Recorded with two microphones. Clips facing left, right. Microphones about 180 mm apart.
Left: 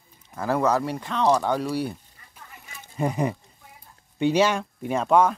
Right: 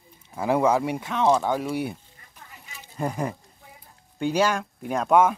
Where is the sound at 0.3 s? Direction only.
15° right (ahead or behind).